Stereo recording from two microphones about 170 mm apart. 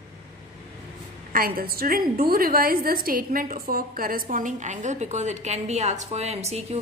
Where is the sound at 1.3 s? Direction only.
60° right (ahead or behind).